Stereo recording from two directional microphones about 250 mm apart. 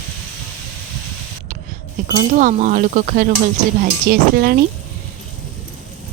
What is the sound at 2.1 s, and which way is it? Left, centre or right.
Speech, right.